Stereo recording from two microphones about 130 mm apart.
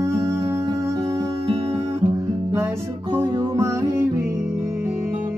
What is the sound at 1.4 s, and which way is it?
Music, 45° right (ahead or behind).